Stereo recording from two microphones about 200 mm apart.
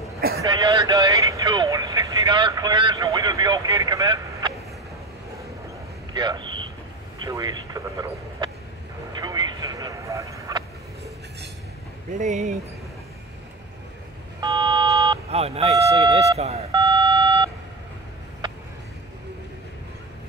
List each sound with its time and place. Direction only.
0.4 s vehicle: 20° right (ahead or behind)
6.1 s a man's voice: 20° right (ahead or behind)
9.1 s vehicle: 20° right (ahead or behind)
12.1 s speech: 40° right (ahead or behind)
14.4 s a sound: 20° right (ahead or behind)
15.2 s a sound: 30° right (ahead or behind)